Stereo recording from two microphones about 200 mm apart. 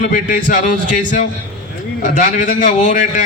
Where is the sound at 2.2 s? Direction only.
40° left (ahead or behind).